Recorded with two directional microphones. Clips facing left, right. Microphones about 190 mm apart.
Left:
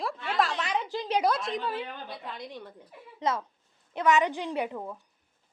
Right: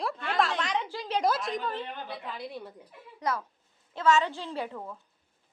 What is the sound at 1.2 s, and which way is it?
A woman's voice, centre (ahead or behind).